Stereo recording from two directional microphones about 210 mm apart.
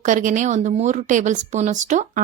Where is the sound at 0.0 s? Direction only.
40° right (ahead or behind).